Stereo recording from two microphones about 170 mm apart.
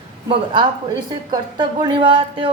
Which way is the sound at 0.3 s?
25° right (ahead or behind).